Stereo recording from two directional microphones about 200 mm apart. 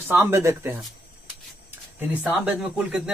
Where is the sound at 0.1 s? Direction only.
10° right (ahead or behind).